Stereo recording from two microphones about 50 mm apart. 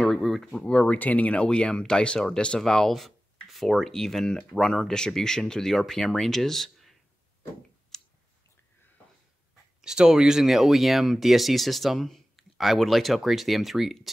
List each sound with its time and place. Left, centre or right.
0.0 s a sound: centre
0.9 s speech: left; by 7.0 s centre
7.9 s clicking: centre
9.8 s speech: centre